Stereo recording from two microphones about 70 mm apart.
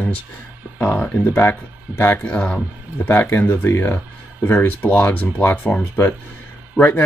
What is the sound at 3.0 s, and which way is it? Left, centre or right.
Speech, left.